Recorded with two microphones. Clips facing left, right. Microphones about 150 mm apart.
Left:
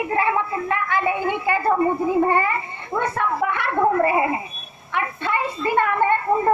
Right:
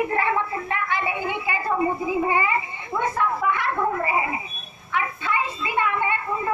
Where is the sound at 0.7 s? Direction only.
45° left (ahead or behind).